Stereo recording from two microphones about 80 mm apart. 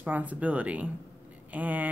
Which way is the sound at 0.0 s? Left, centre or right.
Centre.